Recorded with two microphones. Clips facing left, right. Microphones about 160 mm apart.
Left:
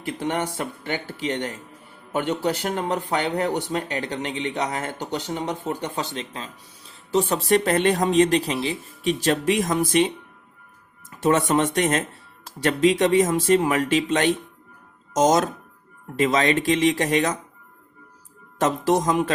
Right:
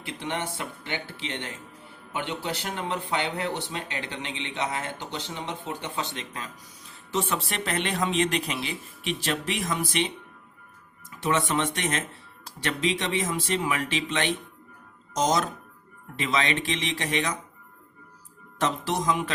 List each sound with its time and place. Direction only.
0.0 s speech: 45° left (ahead or behind)
11.2 s speech: 45° left (ahead or behind)
18.6 s speech: 45° left (ahead or behind)